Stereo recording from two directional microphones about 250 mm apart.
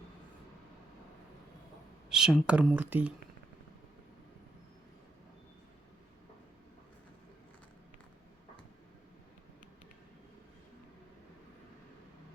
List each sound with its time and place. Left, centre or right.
2.0 s speech: centre